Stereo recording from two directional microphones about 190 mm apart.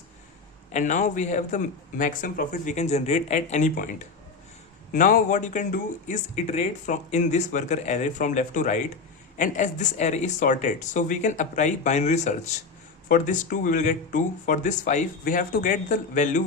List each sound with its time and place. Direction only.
0.7 s speech: 40° left (ahead or behind)